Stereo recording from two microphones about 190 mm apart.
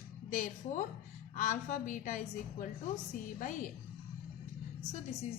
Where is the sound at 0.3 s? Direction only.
45° left (ahead or behind).